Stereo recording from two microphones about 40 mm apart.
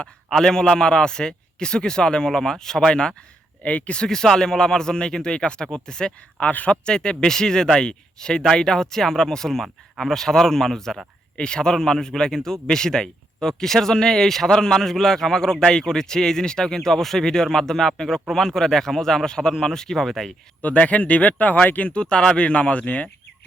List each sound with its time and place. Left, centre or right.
0.3 s a man's voice: centre
3.6 s speech: left
3.9 s a man's voice: centre
6.4 s speech: left
6.7 s speech: left; by 20.3 s centre
20.6 s speech: left
21.8 s a man's voice: left